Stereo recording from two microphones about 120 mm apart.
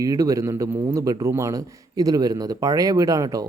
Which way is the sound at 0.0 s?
30° right (ahead or behind).